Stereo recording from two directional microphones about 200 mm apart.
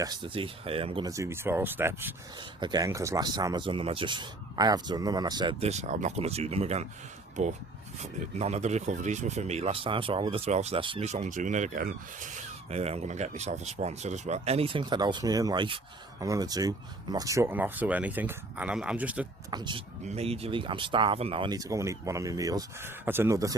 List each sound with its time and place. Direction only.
0.0 s speech: 25° right (ahead or behind)
1.1 s speech: 15° right (ahead or behind)
2.6 s speech: 20° right (ahead or behind)
7.9 s speech: 35° right (ahead or behind); by 19.3 s 5° right (ahead or behind)
19.5 s speech: 20° right (ahead or behind)